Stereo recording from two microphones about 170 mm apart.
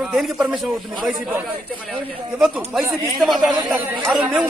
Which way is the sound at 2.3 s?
5° right (ahead or behind).